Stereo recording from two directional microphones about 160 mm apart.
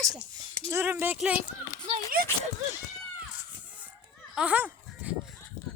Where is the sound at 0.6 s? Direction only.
15° right (ahead or behind).